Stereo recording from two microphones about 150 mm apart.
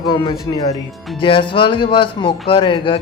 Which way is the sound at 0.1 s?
30° left (ahead or behind).